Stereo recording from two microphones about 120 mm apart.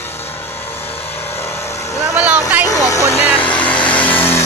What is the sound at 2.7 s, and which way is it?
Vehicle, 30° left (ahead or behind).